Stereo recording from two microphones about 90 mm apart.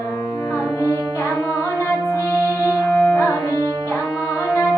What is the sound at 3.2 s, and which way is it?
Music, 35° left (ahead or behind).